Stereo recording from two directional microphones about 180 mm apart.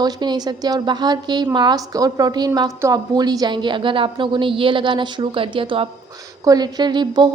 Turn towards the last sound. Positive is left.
turn(degrees=-25)  # may be behind; listen again after turning